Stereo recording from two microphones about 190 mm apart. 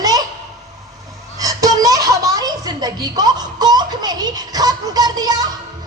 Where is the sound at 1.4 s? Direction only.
20° right (ahead or behind).